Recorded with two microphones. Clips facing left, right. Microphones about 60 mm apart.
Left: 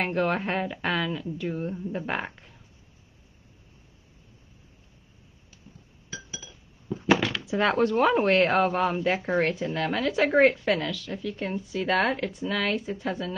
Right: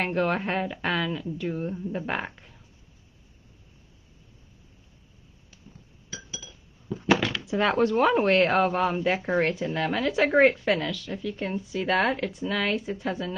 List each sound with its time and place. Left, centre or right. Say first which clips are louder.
0.0 s speech: even; centre
6.3 s chink: even; left
7.0 s speech: even; centre